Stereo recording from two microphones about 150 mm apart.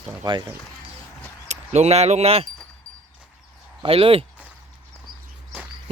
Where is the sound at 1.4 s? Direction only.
50° right (ahead or behind).